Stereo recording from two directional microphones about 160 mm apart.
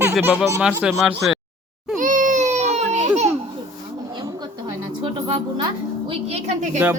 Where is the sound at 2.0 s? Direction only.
55° right (ahead or behind).